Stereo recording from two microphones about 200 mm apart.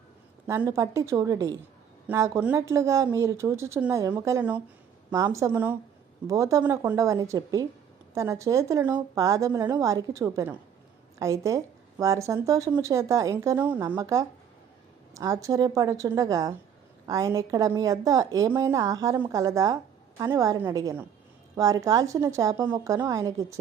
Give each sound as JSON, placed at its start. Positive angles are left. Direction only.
{"t": 0.4, "sound": "a woman's voice", "side_deg": -15}